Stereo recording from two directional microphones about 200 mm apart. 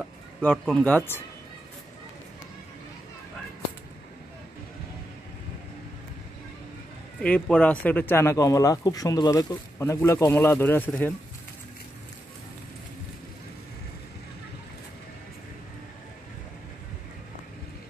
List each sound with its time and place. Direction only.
0.4 s speech: 5° left (ahead or behind)
7.2 s speech: 5° left (ahead or behind)